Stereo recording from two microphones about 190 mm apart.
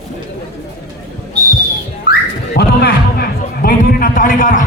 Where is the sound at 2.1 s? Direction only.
50° left (ahead or behind).